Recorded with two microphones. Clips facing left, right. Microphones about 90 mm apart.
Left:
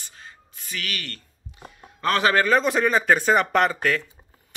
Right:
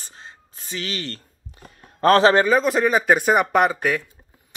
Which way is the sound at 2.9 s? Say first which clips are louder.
Right 1 dB; 15° right (ahead or behind).